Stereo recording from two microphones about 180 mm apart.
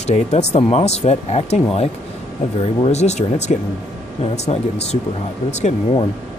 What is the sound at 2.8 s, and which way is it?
Speech, 40° left (ahead or behind).